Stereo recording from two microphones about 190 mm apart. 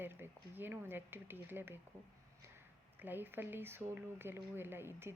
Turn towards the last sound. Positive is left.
turn(degrees=-10)  # may be behind; listen again after turning